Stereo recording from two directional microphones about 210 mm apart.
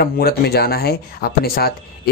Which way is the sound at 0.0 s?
50° left (ahead or behind).